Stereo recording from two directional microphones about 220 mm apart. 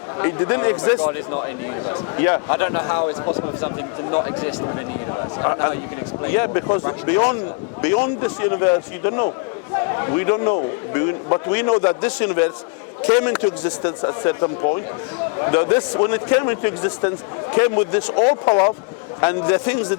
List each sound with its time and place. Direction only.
0.2 s a man's voice: 20° left (ahead or behind)
18.4 s a man's voice: 30° left (ahead or behind)